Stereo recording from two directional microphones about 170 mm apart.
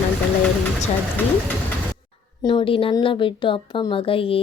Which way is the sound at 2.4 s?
30° left (ahead or behind).